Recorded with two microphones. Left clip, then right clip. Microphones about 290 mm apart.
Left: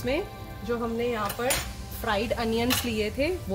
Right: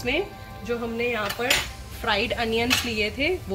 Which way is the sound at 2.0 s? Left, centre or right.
Left.